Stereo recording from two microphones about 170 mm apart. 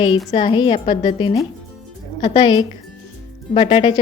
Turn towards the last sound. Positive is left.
turn(degrees=30)  # may be behind; listen again after turning